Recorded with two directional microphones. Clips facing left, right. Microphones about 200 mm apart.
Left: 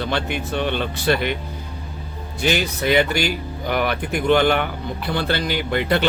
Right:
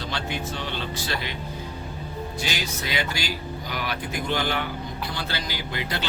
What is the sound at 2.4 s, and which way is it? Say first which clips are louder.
A man's voice: left 14 dB; 60° left (ahead or behind).